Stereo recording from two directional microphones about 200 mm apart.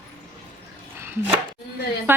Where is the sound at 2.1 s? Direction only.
10° right (ahead or behind).